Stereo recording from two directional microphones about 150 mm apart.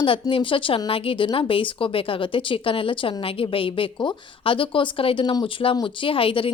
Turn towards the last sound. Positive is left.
turn(degrees=35)  # may be behind; listen again after turning